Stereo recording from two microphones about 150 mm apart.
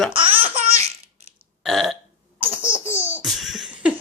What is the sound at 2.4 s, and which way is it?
Laughter, 35° right (ahead or behind).